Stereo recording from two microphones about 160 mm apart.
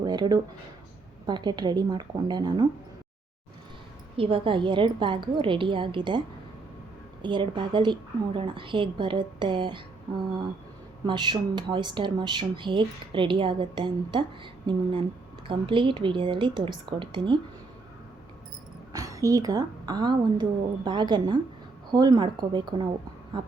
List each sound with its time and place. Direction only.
0.0 s speech: 25° right (ahead or behind)
4.2 s a woman's voice: 35° right (ahead or behind)
11.0 s a woman's voice: 30° right (ahead or behind)
18.9 s speech: 20° right (ahead or behind)